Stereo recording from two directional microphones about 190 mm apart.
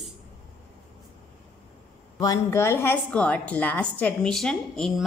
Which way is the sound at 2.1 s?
20° left (ahead or behind).